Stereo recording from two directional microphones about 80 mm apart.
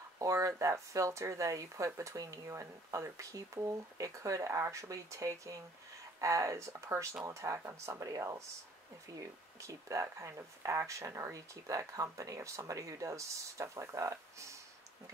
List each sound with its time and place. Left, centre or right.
0.2 s speech: right